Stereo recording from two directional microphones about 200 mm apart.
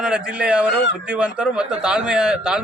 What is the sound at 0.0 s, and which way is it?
A man's voice, 5° right (ahead or behind).